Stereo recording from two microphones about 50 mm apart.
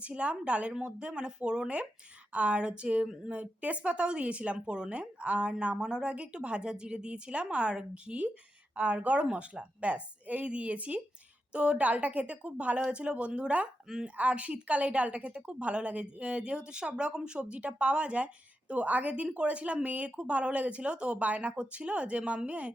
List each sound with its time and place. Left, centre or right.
0.0 s a woman's voice: right